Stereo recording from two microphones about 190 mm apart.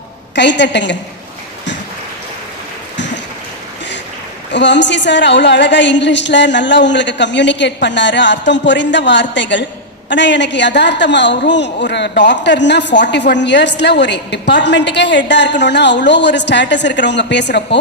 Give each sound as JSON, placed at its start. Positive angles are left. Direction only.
{"t": 0.3, "sound": "a woman's voice", "side_deg": 65}
{"t": 4.5, "sound": "a woman's voice", "side_deg": 70}